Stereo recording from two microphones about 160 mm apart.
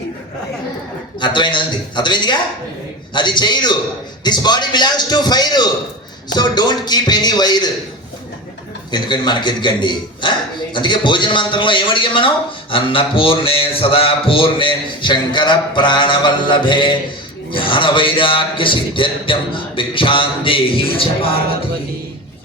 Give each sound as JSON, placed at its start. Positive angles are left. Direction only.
{"t": 1.2, "sound": "a man's voice", "side_deg": 30}
{"t": 8.9, "sound": "a man's voice", "side_deg": 30}